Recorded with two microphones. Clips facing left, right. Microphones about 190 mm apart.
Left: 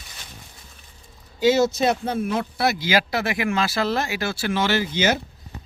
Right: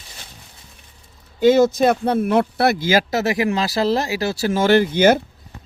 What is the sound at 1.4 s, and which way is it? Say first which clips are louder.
Speech: right 5 dB; 55° right (ahead or behind).